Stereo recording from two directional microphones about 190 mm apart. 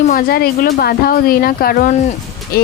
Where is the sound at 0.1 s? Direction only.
50° left (ahead or behind).